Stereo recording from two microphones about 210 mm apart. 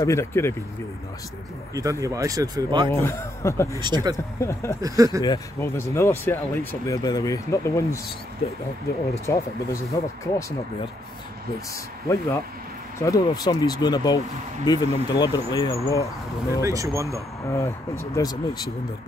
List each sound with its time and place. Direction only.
0.0 s speech: 15° left (ahead or behind)
1.7 s speech: 15° right (ahead or behind)
2.9 s speech: 15° left (ahead or behind)
3.8 s speech: 20° right (ahead or behind)
4.4 s speech: 15° left (ahead or behind)
4.8 s speech: 15° right (ahead or behind)
5.2 s speech: 15° left (ahead or behind)
9.2 s speech: 15° left (ahead or behind)
11.7 s speech: 15° left (ahead or behind)
16.6 s speech: 15° right (ahead or behind)
17.5 s speech: 15° left (ahead or behind)